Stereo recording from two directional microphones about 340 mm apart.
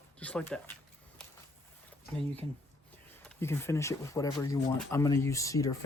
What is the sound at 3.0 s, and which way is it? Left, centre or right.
Speech, centre.